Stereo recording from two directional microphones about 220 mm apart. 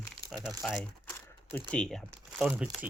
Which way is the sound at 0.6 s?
5° left (ahead or behind).